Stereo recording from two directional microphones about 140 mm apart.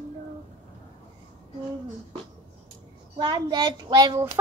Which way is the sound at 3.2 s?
30° right (ahead or behind).